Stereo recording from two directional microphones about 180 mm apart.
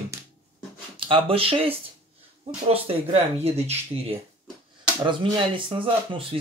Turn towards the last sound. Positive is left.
turn(degrees=-30)  # may be behind; listen again after turning